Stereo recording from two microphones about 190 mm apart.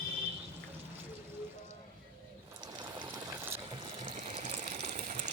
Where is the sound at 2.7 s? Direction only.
25° right (ahead or behind).